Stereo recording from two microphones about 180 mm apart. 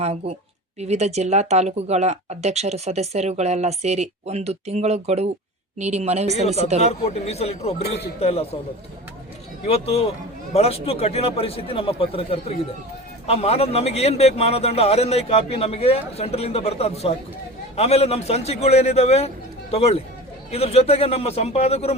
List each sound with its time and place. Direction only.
0.0 s speech: 35° right (ahead or behind)
6.8 s a man's voice: 35° left (ahead or behind)
7.8 s speech: 65° left (ahead or behind)
8.2 s a man's voice: 35° left (ahead or behind)
9.6 s a man's voice: 35° left (ahead or behind)